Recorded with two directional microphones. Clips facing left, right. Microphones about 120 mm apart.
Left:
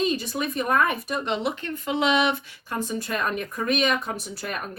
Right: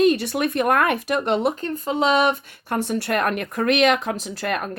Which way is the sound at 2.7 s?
70° right (ahead or behind).